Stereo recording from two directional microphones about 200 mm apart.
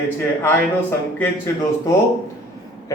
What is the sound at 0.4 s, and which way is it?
Speech, 10° left (ahead or behind).